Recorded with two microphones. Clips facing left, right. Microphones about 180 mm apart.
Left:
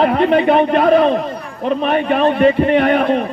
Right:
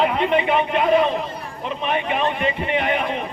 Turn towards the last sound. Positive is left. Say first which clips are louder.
# left 9 dB
turn(degrees=45)  # may be behind; listen again after turning